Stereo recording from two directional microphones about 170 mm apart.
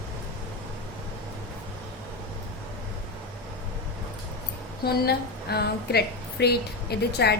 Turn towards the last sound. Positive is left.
turn(degrees=75)  # may be behind; listen again after turning